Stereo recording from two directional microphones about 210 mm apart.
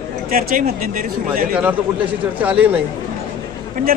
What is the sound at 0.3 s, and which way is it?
Speech, 40° right (ahead or behind).